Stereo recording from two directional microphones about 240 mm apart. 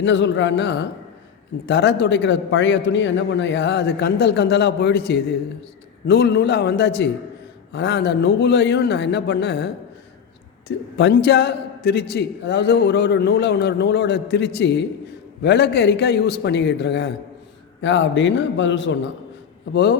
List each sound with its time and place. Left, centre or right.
0.0 s a man's voice: left
10.9 s a man's voice: left